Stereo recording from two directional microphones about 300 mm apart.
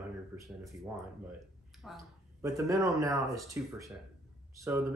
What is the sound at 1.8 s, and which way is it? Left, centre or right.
Speech, centre.